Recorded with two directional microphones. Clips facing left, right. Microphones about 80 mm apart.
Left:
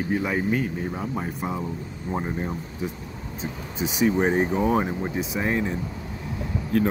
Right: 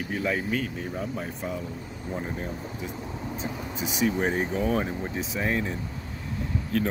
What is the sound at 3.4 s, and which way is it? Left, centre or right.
Speech, centre.